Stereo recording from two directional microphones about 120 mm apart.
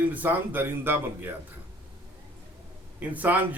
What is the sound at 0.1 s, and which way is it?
A man's voice, 15° right (ahead or behind).